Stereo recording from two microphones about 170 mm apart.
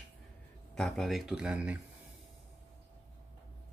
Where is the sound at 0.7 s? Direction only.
Centre (ahead or behind).